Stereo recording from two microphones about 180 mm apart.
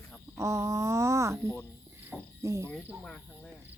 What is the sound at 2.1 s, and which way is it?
Owl, 15° right (ahead or behind).